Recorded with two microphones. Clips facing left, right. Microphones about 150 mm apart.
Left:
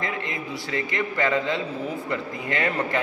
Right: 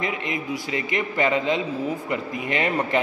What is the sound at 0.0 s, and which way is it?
A man's voice, 20° right (ahead or behind).